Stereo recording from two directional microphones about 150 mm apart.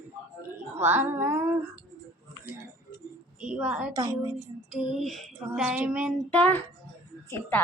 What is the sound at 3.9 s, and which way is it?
Speech, 25° right (ahead or behind).